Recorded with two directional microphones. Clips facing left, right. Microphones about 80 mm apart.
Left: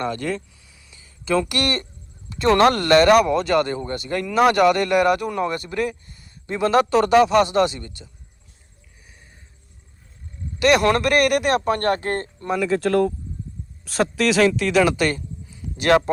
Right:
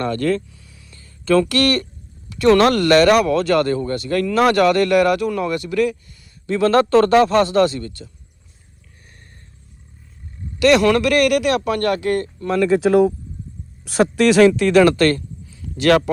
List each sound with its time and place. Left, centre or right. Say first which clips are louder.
0.0 s speech: right 5 dB; centre
0.9 s a sound: right 5 dB; centre
2.3 s speech: right 3 dB; left
6.5 s speech: right 4 dB; centre
10.6 s speech: right 3 dB; left
12.5 s speech: right 6 dB; centre
12.8 s speech: right 5 dB; centre
14.9 s a sound: right 6 dB; centre